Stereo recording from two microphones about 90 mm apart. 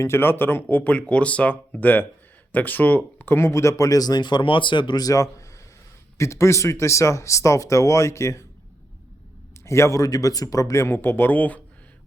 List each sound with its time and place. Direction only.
0.0 s speech: 25° left (ahead or behind)
9.6 s speech: 30° left (ahead or behind)